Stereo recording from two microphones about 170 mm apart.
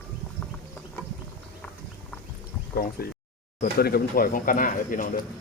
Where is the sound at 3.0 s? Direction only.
65° left (ahead or behind).